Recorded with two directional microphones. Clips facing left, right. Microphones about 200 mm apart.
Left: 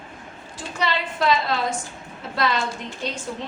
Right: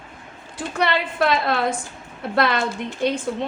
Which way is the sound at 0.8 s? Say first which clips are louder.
Right 4 dB; 60° right (ahead or behind).